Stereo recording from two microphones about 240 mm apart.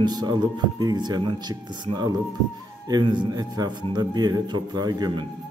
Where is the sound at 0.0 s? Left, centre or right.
Centre.